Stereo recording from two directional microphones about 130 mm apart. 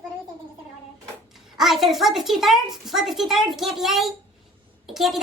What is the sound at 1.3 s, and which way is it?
A child's voice, centre (ahead or behind).